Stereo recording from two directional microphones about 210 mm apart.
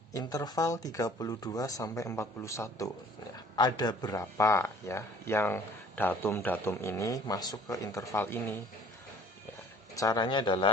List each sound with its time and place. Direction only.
0.1 s speech: 15° left (ahead or behind)
9.9 s speech: 15° left (ahead or behind)